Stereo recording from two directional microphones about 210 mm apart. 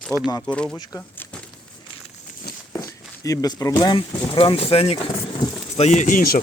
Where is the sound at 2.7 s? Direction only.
15° left (ahead or behind).